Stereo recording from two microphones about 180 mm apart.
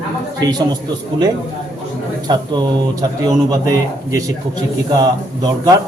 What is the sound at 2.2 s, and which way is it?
A man's voice, 25° right (ahead or behind).